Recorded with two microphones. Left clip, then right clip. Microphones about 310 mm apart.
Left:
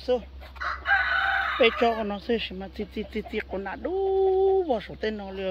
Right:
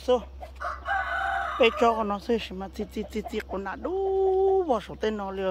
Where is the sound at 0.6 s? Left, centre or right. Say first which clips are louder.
Left 5 dB; right.